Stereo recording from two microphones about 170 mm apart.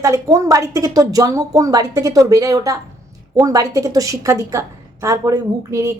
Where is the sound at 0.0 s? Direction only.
20° right (ahead or behind).